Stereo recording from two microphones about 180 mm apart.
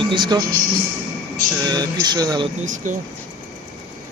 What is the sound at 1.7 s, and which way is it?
Speech, 20° right (ahead or behind).